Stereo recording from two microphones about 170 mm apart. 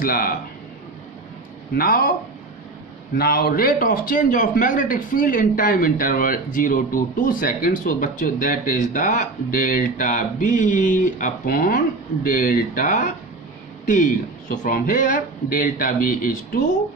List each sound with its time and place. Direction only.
0.0 s speech: 55° left (ahead or behind)
1.7 s speech: 60° left (ahead or behind)
3.2 s a man's voice: 60° left (ahead or behind)